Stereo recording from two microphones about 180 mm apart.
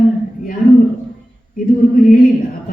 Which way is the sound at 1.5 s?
50° left (ahead or behind).